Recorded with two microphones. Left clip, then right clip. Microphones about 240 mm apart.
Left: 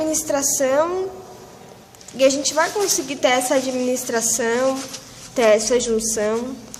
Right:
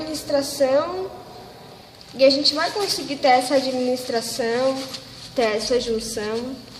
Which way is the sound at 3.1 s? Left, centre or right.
Left.